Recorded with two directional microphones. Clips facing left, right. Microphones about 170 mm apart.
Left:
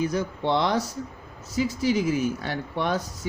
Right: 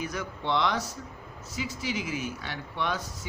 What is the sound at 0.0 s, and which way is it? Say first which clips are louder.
A man's voice: left 8 dB; 30° left (ahead or behind).